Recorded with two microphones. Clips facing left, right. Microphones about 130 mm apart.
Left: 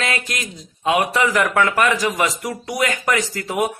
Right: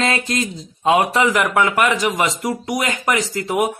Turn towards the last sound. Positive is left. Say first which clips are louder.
# right 2 dB
turn(degrees=-20)  # may be behind; listen again after turning